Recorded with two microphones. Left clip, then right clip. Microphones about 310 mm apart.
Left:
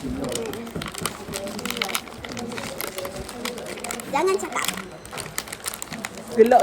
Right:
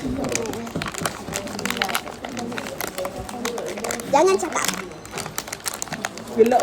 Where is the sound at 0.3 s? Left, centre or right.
Right.